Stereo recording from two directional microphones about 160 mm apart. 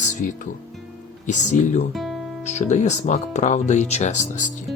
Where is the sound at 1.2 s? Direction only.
50° left (ahead or behind).